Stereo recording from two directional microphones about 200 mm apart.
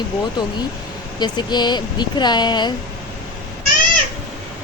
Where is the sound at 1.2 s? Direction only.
20° left (ahead or behind).